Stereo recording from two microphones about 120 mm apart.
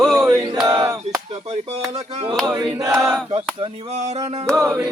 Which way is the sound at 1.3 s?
60° right (ahead or behind).